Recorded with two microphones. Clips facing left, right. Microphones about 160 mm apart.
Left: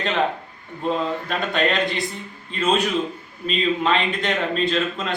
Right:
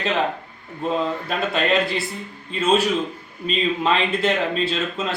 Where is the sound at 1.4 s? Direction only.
5° right (ahead or behind).